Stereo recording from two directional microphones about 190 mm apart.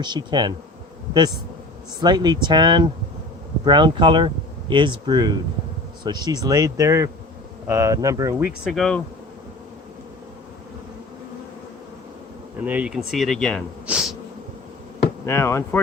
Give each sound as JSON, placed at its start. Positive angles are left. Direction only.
{"t": 0.0, "sound": "speech", "side_deg": -25}
{"t": 2.0, "sound": "speech", "side_deg": -20}
{"t": 8.7, "sound": "speech", "side_deg": 5}
{"t": 12.6, "sound": "speech", "side_deg": -5}
{"t": 13.8, "sound": "insect", "side_deg": -5}
{"t": 15.3, "sound": "speech", "side_deg": 15}